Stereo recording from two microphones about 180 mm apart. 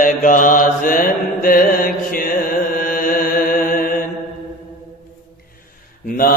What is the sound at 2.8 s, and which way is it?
Music, 50° left (ahead or behind).